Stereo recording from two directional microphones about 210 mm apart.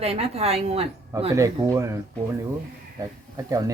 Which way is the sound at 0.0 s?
30° right (ahead or behind).